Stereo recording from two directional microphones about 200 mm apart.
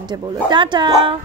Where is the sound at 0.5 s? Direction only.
25° right (ahead or behind).